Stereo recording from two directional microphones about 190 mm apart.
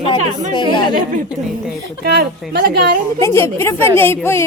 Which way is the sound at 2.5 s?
60° right (ahead or behind).